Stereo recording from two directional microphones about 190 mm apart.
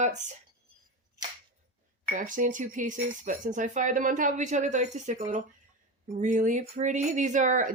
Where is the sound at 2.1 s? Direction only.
45° right (ahead or behind).